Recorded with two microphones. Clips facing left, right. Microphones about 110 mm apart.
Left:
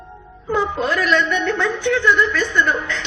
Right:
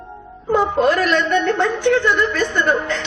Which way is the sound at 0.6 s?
45° right (ahead or behind).